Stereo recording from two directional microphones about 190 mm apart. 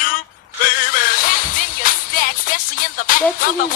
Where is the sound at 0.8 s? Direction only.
45° left (ahead or behind).